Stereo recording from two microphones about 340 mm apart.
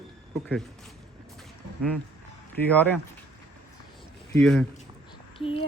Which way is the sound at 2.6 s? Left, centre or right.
Centre.